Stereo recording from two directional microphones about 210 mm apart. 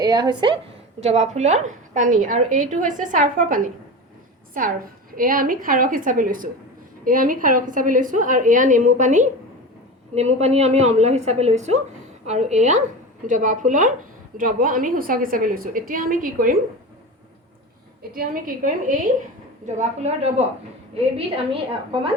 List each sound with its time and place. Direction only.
0.0 s a woman's voice: 20° right (ahead or behind)
0.9 s a woman's voice: 30° right (ahead or behind)
5.1 s a woman's voice: 40° right (ahead or behind)
18.1 s a woman's voice: 40° right (ahead or behind)